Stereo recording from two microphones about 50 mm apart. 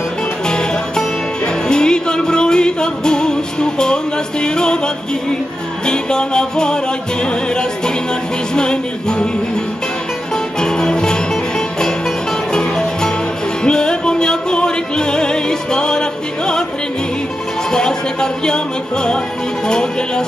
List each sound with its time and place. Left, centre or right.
1.7 s music: centre
5.9 s music: centre
10.6 s music: centre
12.5 s music: centre
17.7 s music: centre
19.7 s music: centre